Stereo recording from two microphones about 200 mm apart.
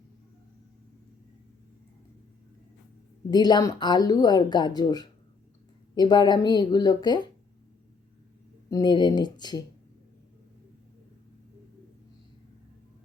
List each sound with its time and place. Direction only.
3.2 s a woman's voice: 20° left (ahead or behind)
8.7 s a woman's voice: 20° left (ahead or behind)